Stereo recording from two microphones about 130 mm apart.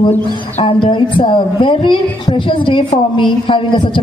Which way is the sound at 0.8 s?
40° left (ahead or behind).